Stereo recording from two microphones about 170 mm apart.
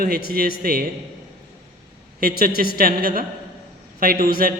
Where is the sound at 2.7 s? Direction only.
60° right (ahead or behind).